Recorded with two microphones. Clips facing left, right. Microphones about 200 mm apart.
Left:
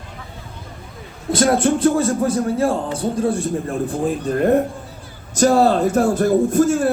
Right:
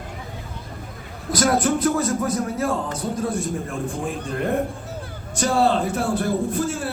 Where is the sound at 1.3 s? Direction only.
25° left (ahead or behind).